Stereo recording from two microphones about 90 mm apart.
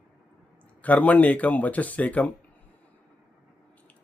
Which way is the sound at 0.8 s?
15° left (ahead or behind).